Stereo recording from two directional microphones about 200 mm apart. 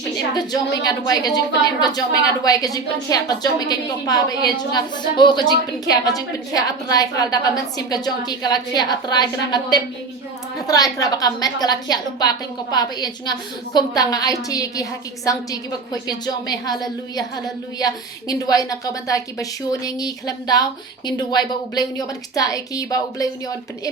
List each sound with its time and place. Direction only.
0.3 s a woman's voice: 20° left (ahead or behind)